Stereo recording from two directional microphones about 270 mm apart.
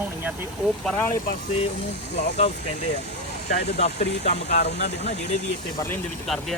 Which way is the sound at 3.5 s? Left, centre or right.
Left.